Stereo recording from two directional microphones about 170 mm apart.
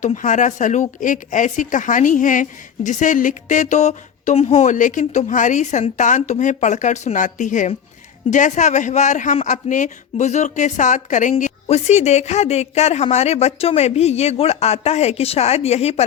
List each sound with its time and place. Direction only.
0.0 s speech: 45° left (ahead or behind)